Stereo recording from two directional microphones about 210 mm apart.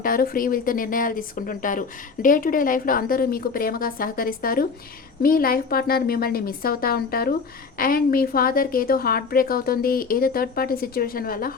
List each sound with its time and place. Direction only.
0.0 s speech: 45° left (ahead or behind)